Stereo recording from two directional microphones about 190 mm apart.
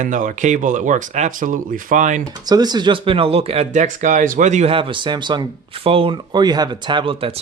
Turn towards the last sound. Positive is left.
turn(degrees=-25)  # may be behind; listen again after turning